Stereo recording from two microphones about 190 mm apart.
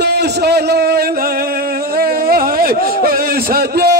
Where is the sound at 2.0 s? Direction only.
50° right (ahead or behind).